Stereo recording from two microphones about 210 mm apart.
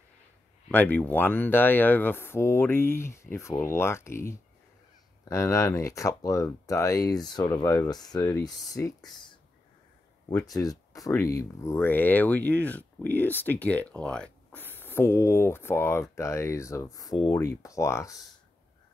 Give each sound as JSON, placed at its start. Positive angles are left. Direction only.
{"t": 0.7, "sound": "speech", "side_deg": 10}
{"t": 10.3, "sound": "speech", "side_deg": 15}